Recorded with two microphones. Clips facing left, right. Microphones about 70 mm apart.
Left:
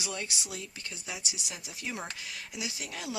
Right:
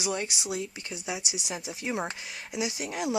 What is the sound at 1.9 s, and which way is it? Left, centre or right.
Speech, right.